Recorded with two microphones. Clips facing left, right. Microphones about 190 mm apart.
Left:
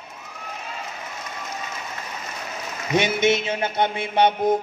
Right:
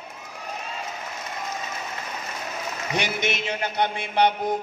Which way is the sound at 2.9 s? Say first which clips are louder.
Left 8 dB; 20° left (ahead or behind).